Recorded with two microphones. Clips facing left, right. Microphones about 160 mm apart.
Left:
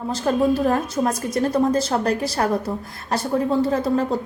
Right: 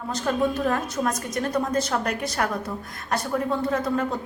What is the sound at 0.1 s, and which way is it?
A woman's voice, 30° left (ahead or behind).